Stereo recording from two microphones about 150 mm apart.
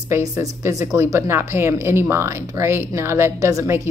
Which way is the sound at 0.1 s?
20° right (ahead or behind).